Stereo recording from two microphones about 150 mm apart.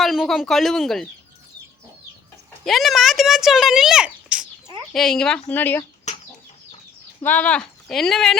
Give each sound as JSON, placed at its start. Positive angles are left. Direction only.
{"t": 0.0, "sound": "speech", "side_deg": 0}
{"t": 2.6, "sound": "speech", "side_deg": 0}
{"t": 6.1, "sound": "chicken", "side_deg": 50}
{"t": 7.2, "sound": "speech", "side_deg": 10}